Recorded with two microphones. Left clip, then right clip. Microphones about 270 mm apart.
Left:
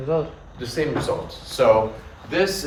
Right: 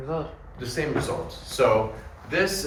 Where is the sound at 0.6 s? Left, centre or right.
Left.